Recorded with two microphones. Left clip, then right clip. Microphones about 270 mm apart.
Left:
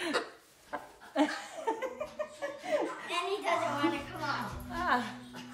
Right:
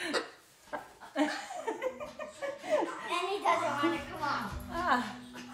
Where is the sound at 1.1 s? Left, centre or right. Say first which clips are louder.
Left 1 dB; centre.